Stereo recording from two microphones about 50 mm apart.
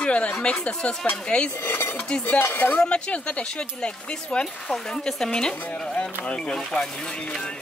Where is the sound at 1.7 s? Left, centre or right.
Left.